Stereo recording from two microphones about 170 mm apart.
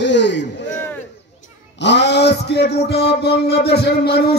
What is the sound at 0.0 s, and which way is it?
Speech, 90° left.